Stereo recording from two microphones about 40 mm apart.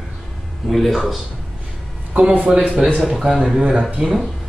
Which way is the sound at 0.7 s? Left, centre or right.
Centre.